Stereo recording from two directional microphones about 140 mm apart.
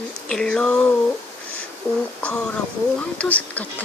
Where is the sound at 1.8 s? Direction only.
10° left (ahead or behind).